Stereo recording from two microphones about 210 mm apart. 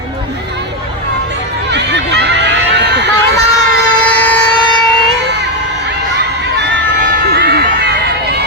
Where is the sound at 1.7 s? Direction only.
55° right (ahead or behind).